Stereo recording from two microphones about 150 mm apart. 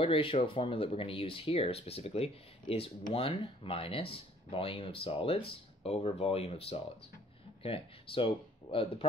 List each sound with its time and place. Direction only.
0.0 s speech: 40° left (ahead or behind)